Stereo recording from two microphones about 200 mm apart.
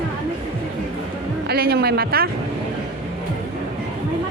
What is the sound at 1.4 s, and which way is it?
Speech, 50° right (ahead or behind).